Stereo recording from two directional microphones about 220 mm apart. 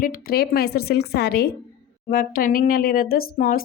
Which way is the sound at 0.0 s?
40° left (ahead or behind).